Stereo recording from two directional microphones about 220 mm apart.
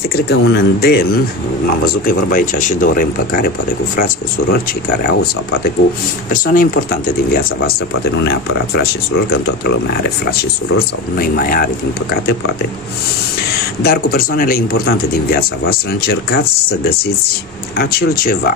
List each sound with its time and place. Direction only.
0.1 s speech: 45° left (ahead or behind)
2.0 s speech: 40° left (ahead or behind)
11.1 s speech: 40° left (ahead or behind)
13.8 s speech: 40° left (ahead or behind)
17.7 s speech: 45° left (ahead or behind)